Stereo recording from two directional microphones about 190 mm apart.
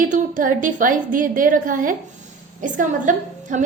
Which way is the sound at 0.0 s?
45° right (ahead or behind).